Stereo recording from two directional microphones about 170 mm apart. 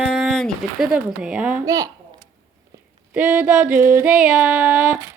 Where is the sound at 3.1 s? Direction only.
5° right (ahead or behind).